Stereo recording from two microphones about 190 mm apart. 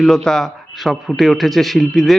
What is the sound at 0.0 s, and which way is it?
A man's voice, centre (ahead or behind).